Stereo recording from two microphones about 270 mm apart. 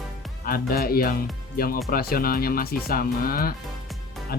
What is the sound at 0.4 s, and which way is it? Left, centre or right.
Speech, left.